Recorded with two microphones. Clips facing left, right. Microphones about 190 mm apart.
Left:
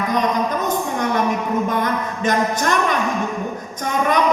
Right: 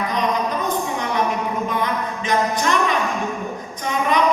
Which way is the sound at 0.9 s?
50° left (ahead or behind).